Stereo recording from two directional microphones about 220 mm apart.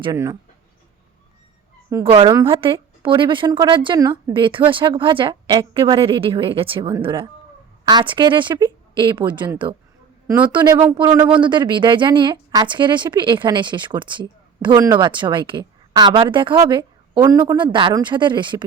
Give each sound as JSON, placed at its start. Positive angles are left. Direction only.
{"t": 0.0, "sound": "speech", "side_deg": -15}
{"t": 1.9, "sound": "a woman's voice", "side_deg": -15}
{"t": 10.2, "sound": "speech", "side_deg": -10}
{"t": 10.5, "sound": "a woman's voice", "side_deg": -20}